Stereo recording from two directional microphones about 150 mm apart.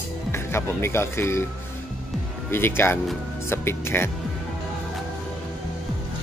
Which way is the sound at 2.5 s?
15° left (ahead or behind).